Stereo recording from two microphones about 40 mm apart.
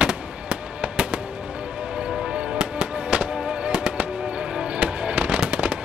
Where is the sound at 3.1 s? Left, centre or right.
Right.